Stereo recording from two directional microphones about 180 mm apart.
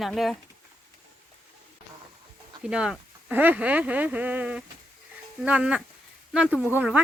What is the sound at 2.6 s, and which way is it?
Speech, 5° right (ahead or behind).